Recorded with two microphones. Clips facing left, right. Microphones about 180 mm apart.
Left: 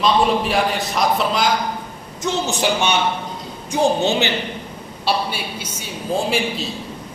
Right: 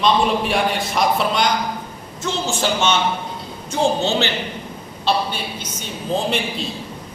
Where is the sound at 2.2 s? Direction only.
15° left (ahead or behind).